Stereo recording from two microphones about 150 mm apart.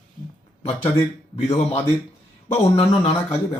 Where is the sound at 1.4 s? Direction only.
45° left (ahead or behind).